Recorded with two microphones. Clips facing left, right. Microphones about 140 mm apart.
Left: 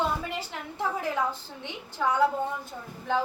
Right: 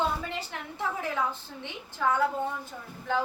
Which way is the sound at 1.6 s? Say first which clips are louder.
Even; 15° left (ahead or behind).